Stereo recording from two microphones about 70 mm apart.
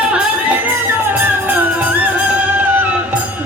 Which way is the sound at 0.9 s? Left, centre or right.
Right.